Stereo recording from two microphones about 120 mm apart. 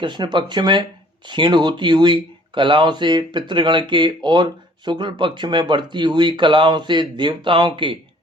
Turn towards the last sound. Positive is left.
turn(degrees=-45)  # may be behind; listen again after turning